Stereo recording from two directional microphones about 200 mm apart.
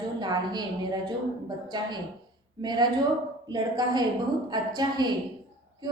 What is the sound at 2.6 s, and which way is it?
A woman's voice, 20° right (ahead or behind).